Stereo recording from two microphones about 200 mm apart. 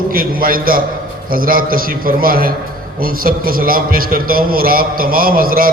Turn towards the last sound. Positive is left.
turn(degrees=-45)  # may be behind; listen again after turning